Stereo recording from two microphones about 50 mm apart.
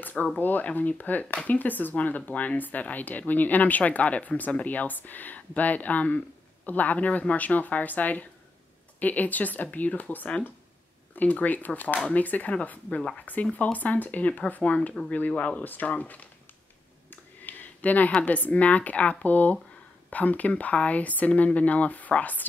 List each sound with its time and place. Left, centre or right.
0.0 s speech: left
17.1 s a sound: left
18.2 s speech: left